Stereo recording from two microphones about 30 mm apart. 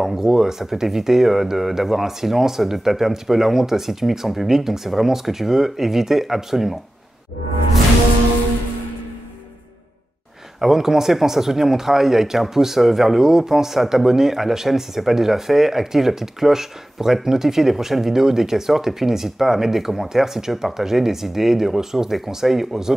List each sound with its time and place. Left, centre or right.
0.0 s speech: centre
10.6 s speech: centre